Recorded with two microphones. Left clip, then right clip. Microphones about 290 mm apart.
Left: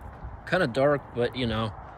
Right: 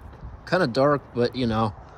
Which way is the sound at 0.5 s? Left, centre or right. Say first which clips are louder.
Right 3 dB; centre.